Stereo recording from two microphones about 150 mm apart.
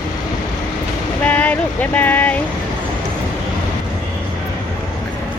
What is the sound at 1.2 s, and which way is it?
Speech, 10° left (ahead or behind).